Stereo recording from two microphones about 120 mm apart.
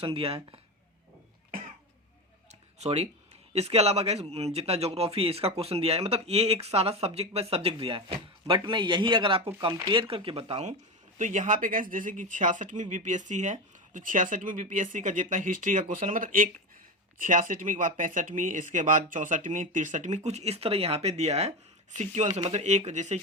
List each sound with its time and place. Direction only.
0.0 s speech: 50° right (ahead or behind)
2.7 s speech: 65° right (ahead or behind)
11.2 s speech: 90° right; by 21.5 s 65° right (ahead or behind)
21.9 s speech: 75° right (ahead or behind)